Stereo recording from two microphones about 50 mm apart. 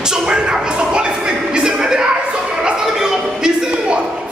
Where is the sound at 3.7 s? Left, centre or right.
Right.